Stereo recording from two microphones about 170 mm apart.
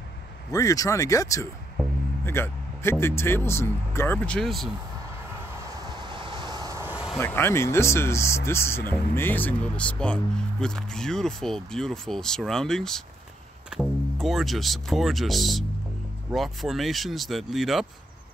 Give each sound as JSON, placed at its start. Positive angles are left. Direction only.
{"t": 0.5, "sound": "speech", "side_deg": 20}
{"t": 4.4, "sound": "speech", "side_deg": 0}
{"t": 5.9, "sound": "vehicle", "side_deg": -30}
{"t": 7.2, "sound": "speech", "side_deg": 15}